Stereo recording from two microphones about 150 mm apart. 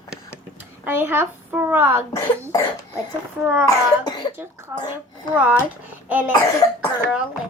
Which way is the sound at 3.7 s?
25° left (ahead or behind).